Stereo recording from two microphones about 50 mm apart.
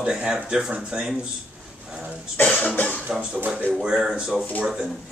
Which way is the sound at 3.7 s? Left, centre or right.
Centre.